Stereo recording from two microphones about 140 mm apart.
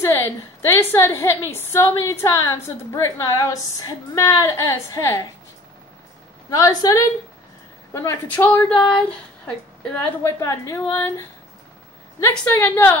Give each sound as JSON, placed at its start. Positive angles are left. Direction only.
{"t": 0.0, "sound": "a woman's voice", "side_deg": 20}
{"t": 6.5, "sound": "a woman's voice", "side_deg": 25}